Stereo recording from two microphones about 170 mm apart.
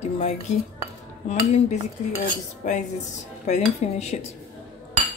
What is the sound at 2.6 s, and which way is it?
Speech, 45° left (ahead or behind).